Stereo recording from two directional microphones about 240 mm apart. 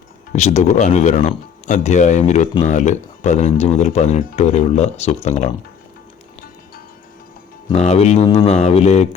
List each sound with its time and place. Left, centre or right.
0.3 s speech: left
7.7 s speech: left